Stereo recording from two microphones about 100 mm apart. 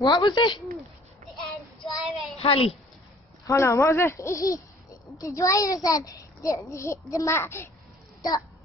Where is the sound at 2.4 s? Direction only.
75° left (ahead or behind).